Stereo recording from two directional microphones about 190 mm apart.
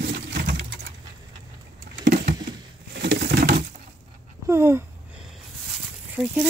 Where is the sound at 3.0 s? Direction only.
60° right (ahead or behind).